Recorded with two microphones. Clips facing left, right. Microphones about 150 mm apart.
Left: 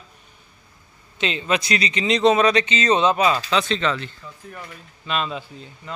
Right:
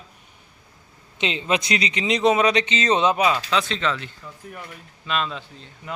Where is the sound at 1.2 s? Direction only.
20° right (ahead or behind).